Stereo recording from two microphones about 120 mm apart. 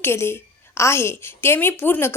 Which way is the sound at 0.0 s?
20° left (ahead or behind).